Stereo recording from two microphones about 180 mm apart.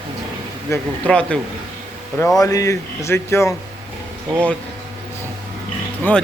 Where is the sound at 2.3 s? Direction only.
20° left (ahead or behind).